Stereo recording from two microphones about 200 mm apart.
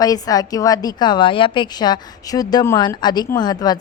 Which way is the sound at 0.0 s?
20° left (ahead or behind).